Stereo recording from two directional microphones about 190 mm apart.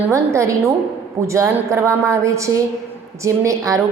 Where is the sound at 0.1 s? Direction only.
15° right (ahead or behind).